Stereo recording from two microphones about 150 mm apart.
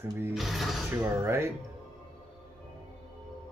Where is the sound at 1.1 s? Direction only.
15° right (ahead or behind).